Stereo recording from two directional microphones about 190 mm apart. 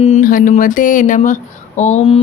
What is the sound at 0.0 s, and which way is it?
Speech, 40° left (ahead or behind).